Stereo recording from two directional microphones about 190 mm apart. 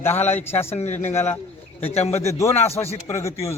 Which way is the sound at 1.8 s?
35° left (ahead or behind).